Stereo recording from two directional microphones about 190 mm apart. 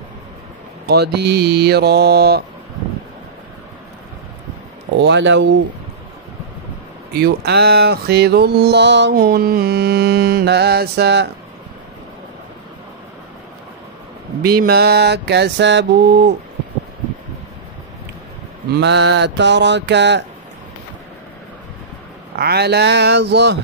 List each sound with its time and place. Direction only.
0.8 s mantra: 60° right (ahead or behind)
4.9 s mantra: 65° right (ahead or behind)
7.2 s mantra: 55° right (ahead or behind)
14.4 s mantra: 55° right (ahead or behind)
18.8 s mantra: 65° right (ahead or behind)
22.3 s mantra: 55° right (ahead or behind)